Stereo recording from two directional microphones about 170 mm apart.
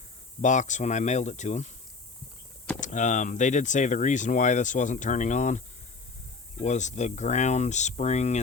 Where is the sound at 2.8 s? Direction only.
45° left (ahead or behind).